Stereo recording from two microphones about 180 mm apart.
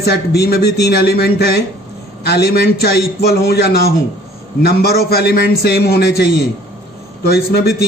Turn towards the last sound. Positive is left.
turn(degrees=60)  # may be behind; listen again after turning